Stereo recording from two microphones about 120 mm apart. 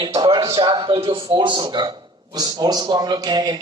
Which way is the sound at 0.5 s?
40° right (ahead or behind).